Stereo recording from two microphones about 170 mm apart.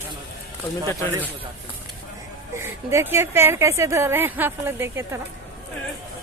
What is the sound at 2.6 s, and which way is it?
Speech, 15° right (ahead or behind).